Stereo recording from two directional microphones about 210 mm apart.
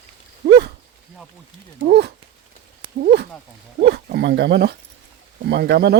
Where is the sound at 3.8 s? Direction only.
50° right (ahead or behind).